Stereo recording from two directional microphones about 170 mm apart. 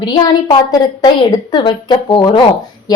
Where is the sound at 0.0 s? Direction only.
25° left (ahead or behind).